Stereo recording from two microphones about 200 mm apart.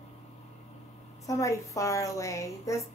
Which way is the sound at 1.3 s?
15° left (ahead or behind).